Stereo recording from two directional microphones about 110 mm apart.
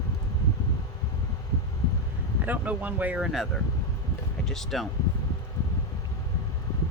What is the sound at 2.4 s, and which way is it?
Speech, 15° right (ahead or behind).